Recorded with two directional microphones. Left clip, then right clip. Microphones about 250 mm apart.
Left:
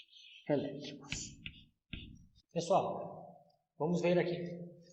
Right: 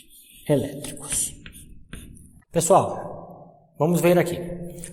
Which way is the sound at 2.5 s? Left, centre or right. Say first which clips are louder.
Right 14 dB; right.